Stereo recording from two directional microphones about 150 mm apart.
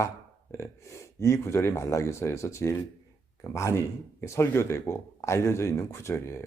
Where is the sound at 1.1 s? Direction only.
20° left (ahead or behind).